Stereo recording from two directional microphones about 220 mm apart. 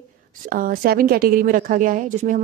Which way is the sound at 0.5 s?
40° right (ahead or behind).